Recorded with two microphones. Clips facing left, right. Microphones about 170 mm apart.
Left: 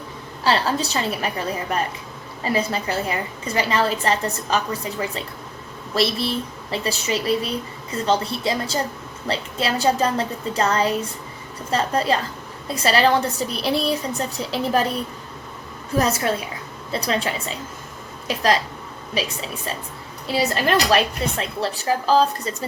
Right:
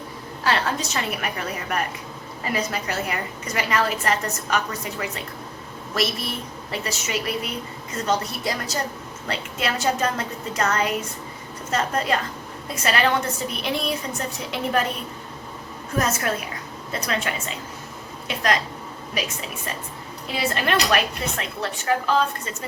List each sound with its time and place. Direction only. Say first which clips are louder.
0.4 s a woman's voice: left 3 dB; 30° left (ahead or behind)
16.0 s a woman's voice: left 3 dB; 35° left (ahead or behind)
19.1 s a woman's voice: left 3 dB; 30° left (ahead or behind)